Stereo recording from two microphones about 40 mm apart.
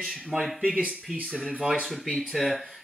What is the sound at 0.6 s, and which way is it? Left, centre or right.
Speech, right.